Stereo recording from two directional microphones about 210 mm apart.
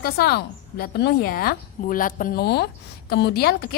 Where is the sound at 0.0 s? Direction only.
50° left (ahead or behind).